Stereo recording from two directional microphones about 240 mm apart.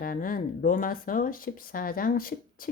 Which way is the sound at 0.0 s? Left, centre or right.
Left.